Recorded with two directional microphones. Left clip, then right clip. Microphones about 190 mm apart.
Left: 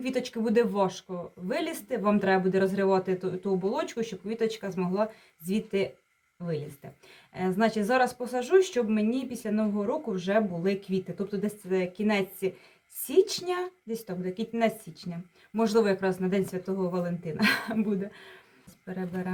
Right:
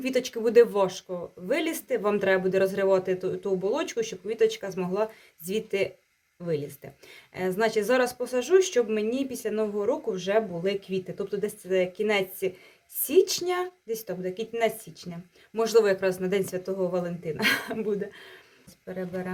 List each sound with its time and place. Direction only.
0.0 s speech: 30° right (ahead or behind)
7.3 s speech: 30° right (ahead or behind)